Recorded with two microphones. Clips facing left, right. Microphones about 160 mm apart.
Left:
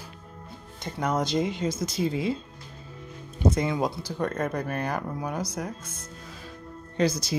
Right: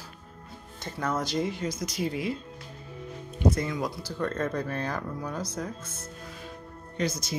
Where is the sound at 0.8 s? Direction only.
15° left (ahead or behind).